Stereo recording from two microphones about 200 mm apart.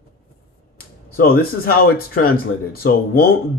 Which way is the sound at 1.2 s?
50° left (ahead or behind).